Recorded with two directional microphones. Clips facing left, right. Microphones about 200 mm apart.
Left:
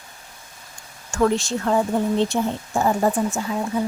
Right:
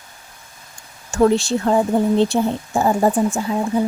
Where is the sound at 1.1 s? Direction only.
35° right (ahead or behind).